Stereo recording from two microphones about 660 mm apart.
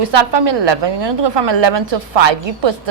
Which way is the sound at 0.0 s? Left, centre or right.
Right.